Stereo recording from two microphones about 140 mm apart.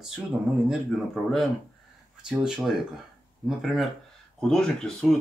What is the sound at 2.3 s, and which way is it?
Speech, 5° right (ahead or behind).